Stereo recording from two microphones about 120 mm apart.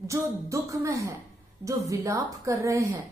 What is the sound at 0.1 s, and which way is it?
A woman's voice, 25° right (ahead or behind).